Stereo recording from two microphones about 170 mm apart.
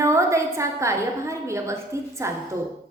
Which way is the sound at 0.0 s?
15° right (ahead or behind).